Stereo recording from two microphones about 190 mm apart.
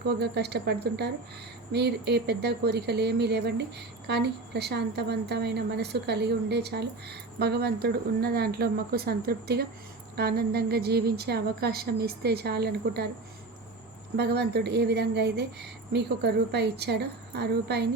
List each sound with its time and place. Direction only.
0.2 s speech: 60° right (ahead or behind)
14.2 s speech: 60° right (ahead or behind)